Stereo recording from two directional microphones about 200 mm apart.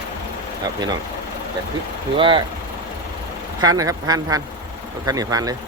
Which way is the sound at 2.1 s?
25° right (ahead or behind).